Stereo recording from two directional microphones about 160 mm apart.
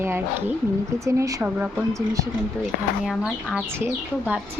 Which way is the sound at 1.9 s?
20° right (ahead or behind).